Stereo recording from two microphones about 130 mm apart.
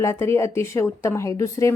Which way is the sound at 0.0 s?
20° left (ahead or behind).